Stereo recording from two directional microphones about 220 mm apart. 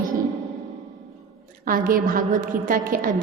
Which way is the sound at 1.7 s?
40° right (ahead or behind).